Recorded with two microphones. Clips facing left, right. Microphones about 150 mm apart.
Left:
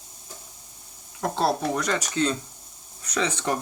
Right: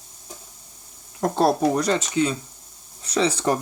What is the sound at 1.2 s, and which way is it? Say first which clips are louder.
Speech: right 5 dB; 45° right (ahead or behind).